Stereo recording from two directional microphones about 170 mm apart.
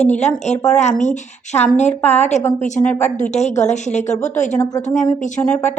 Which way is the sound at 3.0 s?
45° left (ahead or behind).